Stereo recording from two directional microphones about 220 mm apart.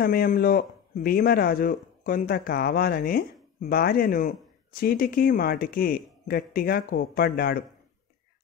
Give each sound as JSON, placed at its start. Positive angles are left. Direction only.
{"t": 0.0, "sound": "a man's voice", "side_deg": 40}